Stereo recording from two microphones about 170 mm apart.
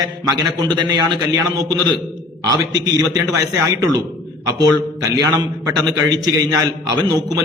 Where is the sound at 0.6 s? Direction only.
25° right (ahead or behind).